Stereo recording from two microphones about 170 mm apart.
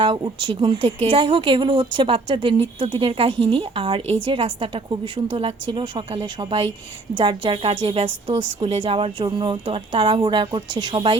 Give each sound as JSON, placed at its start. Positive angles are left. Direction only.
{"t": 0.0, "sound": "speech", "side_deg": -30}